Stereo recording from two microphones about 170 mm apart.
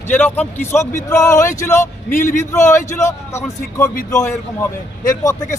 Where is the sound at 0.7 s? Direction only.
15° left (ahead or behind).